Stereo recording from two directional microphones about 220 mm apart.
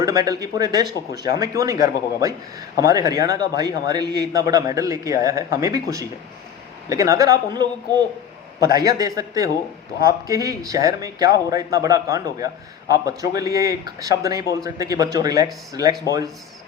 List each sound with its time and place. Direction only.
0.0 s a man's voice: 15° right (ahead or behind)